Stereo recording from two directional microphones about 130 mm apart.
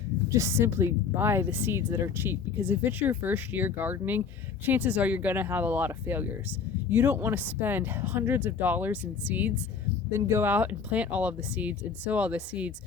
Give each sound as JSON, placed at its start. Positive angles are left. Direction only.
{"t": 0.3, "sound": "speech", "side_deg": -25}